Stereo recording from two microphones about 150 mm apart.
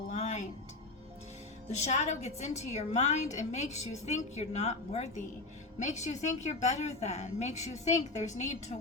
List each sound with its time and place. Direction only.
0.1 s music: 50° left (ahead or behind)
1.8 s a woman's voice: 50° left (ahead or behind)